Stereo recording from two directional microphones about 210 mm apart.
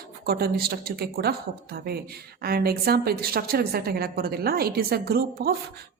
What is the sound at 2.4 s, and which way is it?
A woman's voice, 45° right (ahead or behind).